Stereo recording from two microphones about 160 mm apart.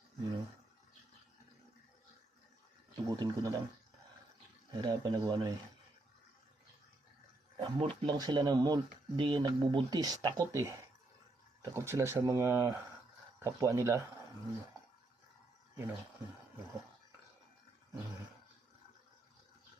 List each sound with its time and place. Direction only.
3.1 s speech: 25° right (ahead or behind)
4.7 s speech: 25° right (ahead or behind)
7.5 s speech: 30° right (ahead or behind)
15.7 s speech: 15° right (ahead or behind)